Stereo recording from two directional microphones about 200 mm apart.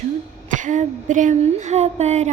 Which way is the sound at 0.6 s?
40° right (ahead or behind).